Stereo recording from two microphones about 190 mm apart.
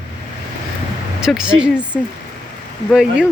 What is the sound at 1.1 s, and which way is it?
Speech, 5° right (ahead or behind).